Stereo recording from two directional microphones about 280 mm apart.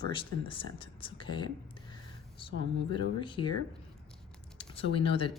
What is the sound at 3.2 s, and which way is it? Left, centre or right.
Speech, centre.